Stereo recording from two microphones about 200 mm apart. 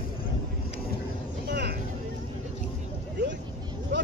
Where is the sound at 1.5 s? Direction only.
55° right (ahead or behind).